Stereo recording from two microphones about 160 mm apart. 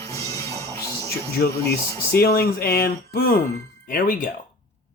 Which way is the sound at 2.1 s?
75° left (ahead or behind).